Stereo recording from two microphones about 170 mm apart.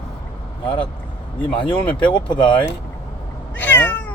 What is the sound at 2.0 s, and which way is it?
Speech, 30° left (ahead or behind).